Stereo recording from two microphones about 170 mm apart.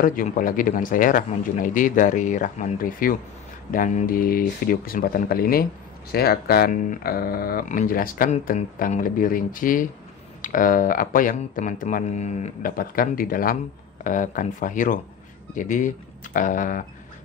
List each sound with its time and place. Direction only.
0.0 s speech: 55° left (ahead or behind)